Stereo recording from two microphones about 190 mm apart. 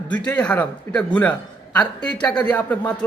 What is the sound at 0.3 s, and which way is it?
A man's voice, 5° left (ahead or behind).